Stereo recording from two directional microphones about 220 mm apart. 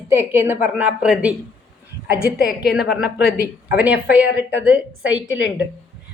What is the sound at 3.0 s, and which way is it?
Speech, 45° left (ahead or behind).